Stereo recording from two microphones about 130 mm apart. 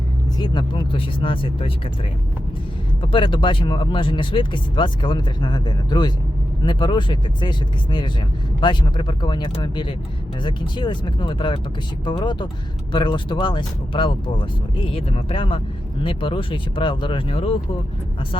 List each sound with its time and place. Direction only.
0.3 s speech: 35° left (ahead or behind)
3.0 s speech: 40° left (ahead or behind)